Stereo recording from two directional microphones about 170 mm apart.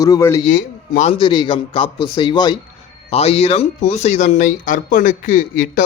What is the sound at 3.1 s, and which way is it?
Speech, 35° left (ahead or behind).